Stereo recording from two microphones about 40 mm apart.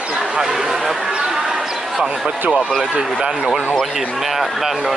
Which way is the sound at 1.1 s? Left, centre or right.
Centre.